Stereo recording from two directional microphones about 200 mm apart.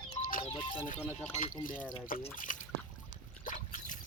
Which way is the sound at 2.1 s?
45° left (ahead or behind).